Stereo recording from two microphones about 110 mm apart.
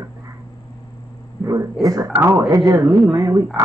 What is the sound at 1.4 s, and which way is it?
Speech, 30° right (ahead or behind).